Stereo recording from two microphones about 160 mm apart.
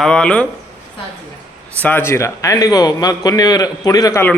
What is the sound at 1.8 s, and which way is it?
A man's voice, 10° left (ahead or behind).